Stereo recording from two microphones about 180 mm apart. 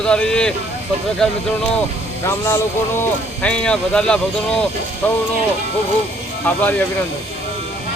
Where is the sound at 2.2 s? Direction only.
15° left (ahead or behind).